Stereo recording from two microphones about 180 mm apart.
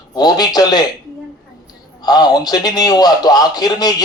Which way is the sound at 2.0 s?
20° left (ahead or behind).